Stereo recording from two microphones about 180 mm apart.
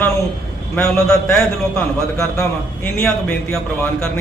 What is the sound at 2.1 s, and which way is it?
A man's voice, 10° left (ahead or behind).